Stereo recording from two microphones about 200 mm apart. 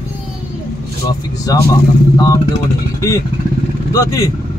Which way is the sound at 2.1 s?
20° left (ahead or behind).